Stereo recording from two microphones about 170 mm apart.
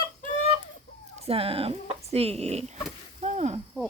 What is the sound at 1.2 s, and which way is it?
Speech, 35° right (ahead or behind).